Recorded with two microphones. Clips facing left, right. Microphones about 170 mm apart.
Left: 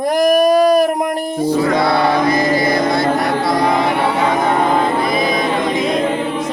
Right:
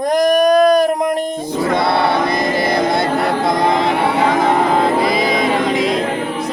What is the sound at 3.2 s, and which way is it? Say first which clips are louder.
A capella: even; 25° right (ahead or behind).